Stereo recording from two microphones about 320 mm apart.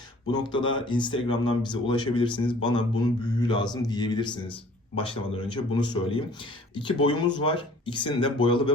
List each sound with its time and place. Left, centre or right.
0.3 s speech: centre